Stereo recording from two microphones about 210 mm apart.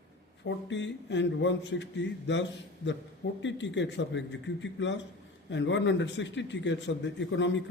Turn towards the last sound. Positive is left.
turn(degrees=60)  # may be behind; listen again after turning